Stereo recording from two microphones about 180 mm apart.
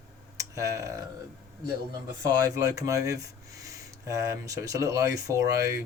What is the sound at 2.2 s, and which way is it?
Speech, 20° right (ahead or behind).